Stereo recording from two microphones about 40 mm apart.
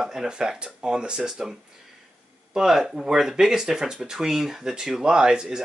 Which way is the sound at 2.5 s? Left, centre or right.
Centre.